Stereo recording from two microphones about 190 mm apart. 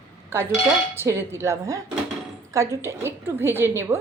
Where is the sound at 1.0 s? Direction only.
15° right (ahead or behind).